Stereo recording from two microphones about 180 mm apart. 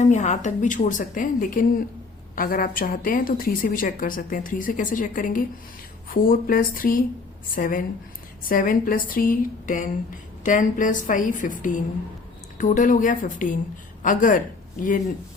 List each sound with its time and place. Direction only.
0.0 s a woman's voice: 40° left (ahead or behind)